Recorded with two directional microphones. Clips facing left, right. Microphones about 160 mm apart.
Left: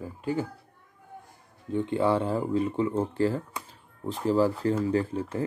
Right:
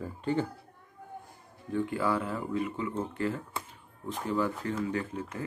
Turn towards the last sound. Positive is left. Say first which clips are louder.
# left 7 dB
turn(degrees=30)  # may be behind; listen again after turning